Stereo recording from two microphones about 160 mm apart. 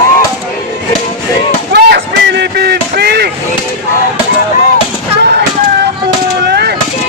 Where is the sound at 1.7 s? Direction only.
90° right.